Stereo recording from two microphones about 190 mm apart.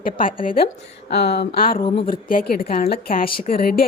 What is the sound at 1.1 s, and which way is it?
Speech, 60° left (ahead or behind).